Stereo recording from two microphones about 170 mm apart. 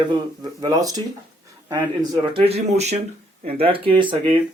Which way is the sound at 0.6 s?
20° right (ahead or behind).